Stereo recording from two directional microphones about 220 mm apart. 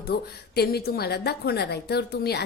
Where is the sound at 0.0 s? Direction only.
45° left (ahead or behind).